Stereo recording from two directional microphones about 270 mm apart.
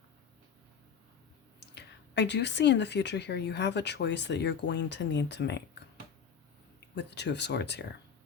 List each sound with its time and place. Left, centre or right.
1.7 s speech: left
6.7 s speech: left